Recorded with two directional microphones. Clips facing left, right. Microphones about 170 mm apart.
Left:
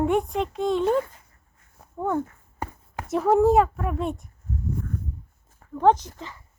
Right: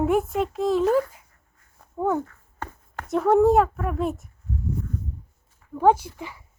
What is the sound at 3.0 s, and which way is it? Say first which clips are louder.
A woman's voice: right 1 dB; centre (ahead or behind).